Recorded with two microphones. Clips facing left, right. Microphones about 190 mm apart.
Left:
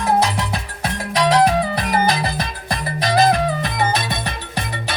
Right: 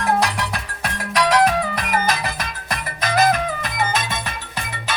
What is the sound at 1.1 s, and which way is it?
Music, 30° left (ahead or behind).